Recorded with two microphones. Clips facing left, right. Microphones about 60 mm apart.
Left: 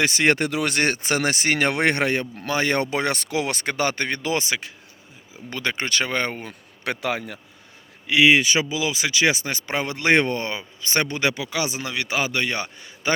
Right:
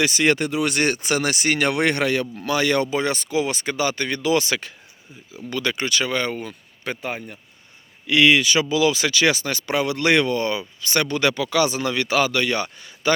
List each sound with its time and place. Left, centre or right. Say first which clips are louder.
0.0 s speech: even; left
2.8 s speech: right 1 dB; left
4.4 s speech: right 3 dB; centre
5.5 s speech: right 2 dB; left
6.8 s a man's voice: left 3 dB; left
8.0 s speech: even; centre